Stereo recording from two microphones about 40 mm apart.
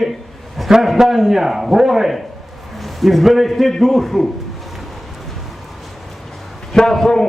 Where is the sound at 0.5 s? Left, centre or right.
Centre.